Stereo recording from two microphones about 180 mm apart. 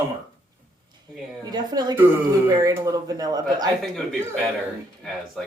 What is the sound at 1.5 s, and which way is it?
A woman's voice, 20° right (ahead or behind).